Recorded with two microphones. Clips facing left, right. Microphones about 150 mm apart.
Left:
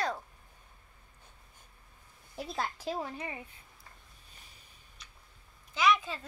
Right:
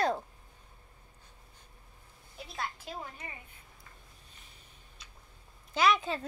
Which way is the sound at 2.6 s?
35° left (ahead or behind).